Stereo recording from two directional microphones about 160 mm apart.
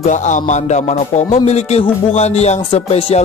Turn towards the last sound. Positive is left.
turn(degrees=40)  # may be behind; listen again after turning